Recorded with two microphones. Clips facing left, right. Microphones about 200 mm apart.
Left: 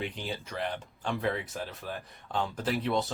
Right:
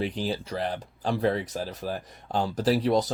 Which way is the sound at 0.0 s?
35° right (ahead or behind).